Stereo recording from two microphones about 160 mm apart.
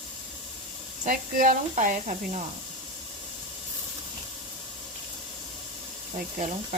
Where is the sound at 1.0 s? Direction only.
55° right (ahead or behind).